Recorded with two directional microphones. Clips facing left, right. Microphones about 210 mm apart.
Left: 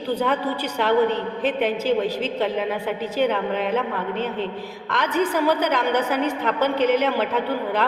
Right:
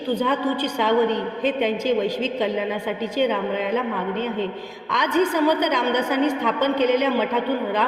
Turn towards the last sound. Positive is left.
turn(degrees=5)  # may be behind; listen again after turning